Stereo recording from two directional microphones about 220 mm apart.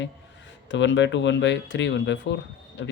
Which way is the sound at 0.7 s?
55° left (ahead or behind).